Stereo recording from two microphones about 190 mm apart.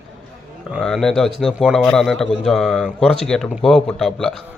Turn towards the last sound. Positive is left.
turn(degrees=5)  # may be behind; listen again after turning